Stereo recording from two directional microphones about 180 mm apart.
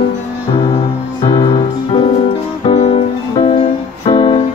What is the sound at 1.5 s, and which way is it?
Music, 35° left (ahead or behind).